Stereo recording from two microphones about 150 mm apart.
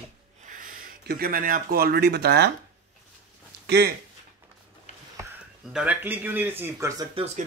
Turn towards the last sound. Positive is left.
turn(degrees=-50)  # may be behind; listen again after turning